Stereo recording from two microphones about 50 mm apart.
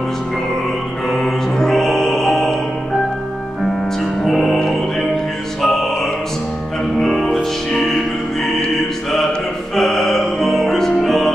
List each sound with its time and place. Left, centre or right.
1.1 s music: centre
4.2 s music: centre
7.0 s music: centre
9.8 s music: centre